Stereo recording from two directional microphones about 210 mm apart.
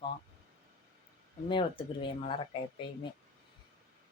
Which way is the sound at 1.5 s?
25° left (ahead or behind).